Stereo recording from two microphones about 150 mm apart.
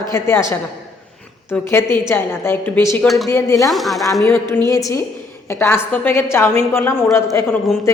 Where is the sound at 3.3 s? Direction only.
20° left (ahead or behind).